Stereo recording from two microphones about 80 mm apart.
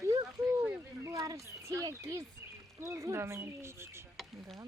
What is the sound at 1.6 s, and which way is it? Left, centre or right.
Speech, right.